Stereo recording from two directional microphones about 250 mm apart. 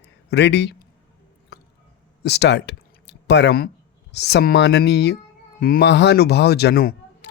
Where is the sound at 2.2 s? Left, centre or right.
Left.